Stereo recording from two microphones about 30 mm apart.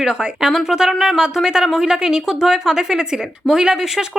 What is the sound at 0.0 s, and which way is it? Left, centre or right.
Speech, right.